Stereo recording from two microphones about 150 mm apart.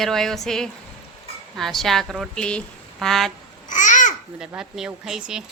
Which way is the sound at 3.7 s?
55° left (ahead or behind).